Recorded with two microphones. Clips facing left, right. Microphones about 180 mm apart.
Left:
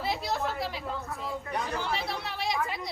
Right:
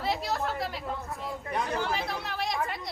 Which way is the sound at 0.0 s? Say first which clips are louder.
Right 1 dB; centre (ahead or behind).